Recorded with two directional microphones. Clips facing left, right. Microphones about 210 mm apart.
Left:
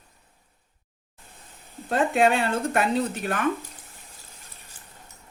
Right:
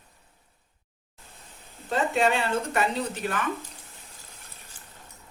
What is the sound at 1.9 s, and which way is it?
A woman's voice, 55° left (ahead or behind).